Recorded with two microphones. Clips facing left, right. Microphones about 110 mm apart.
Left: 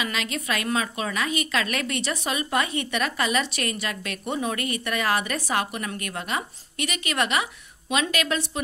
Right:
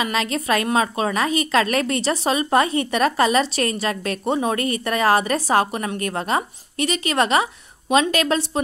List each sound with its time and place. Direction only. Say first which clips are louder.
0.0 s speech: right 6 dB; 35° right (ahead or behind)